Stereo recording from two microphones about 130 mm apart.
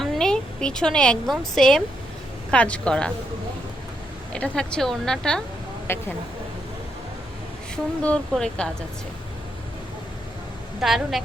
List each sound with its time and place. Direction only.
0.0 s a woman's voice: 5° left (ahead or behind)
4.3 s a woman's voice: 10° left (ahead or behind)
5.9 s speech: 15° left (ahead or behind)
8.0 s speech: 10° left (ahead or behind)
10.8 s a woman's voice: 5° right (ahead or behind)